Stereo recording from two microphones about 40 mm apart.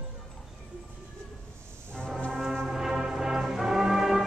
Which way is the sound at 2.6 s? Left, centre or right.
Centre.